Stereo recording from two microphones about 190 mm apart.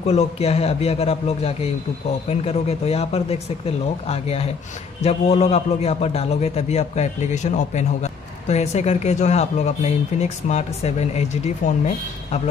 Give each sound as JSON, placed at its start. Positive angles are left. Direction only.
{"t": 0.0, "sound": "a man's voice", "side_deg": 35}